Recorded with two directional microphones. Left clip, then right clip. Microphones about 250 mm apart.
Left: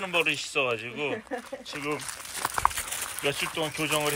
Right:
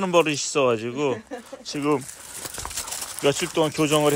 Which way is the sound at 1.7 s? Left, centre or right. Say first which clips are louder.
Right 9 dB; right.